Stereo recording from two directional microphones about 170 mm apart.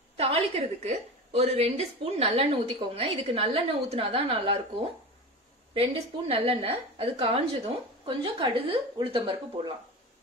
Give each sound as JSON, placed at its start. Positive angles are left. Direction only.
{"t": 0.2, "sound": "a woman's voice", "side_deg": -35}
{"t": 5.8, "sound": "a woman's voice", "side_deg": -35}